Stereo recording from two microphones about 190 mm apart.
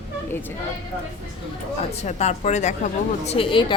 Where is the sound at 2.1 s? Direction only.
35° left (ahead or behind).